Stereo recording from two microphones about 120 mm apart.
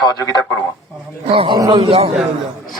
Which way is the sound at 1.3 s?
50° right (ahead or behind).